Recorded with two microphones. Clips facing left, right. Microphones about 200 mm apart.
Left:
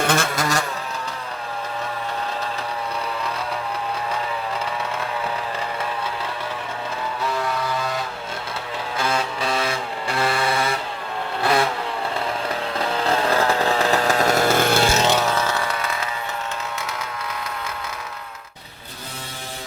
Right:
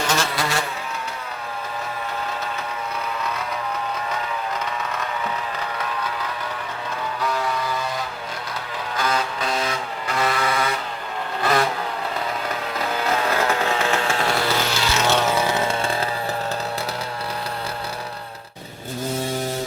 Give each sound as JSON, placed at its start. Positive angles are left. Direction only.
{"t": 0.0, "sound": "a sound", "side_deg": 55}
{"t": 9.0, "sound": "vehicle", "side_deg": 30}
{"t": 10.1, "sound": "a sound", "side_deg": 30}
{"t": 13.0, "sound": "chainsaw", "side_deg": 35}
{"t": 15.1, "sound": "vehicle", "side_deg": 0}
{"t": 15.4, "sound": "chainsaw", "side_deg": -20}